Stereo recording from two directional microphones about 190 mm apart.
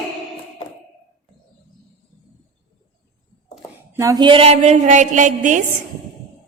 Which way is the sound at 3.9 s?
15° right (ahead or behind).